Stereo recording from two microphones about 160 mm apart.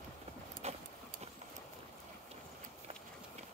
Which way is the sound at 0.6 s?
40° right (ahead or behind).